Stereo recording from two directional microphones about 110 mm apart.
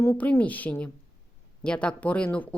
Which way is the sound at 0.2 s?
15° left (ahead or behind).